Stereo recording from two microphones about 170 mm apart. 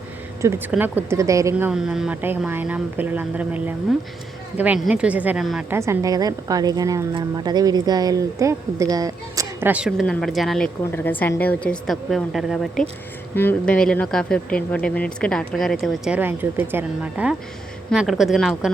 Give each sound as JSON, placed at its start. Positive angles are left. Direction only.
{"t": 0.4, "sound": "speech", "side_deg": -15}
{"t": 5.7, "sound": "speech", "side_deg": -15}
{"t": 10.9, "sound": "speech", "side_deg": 10}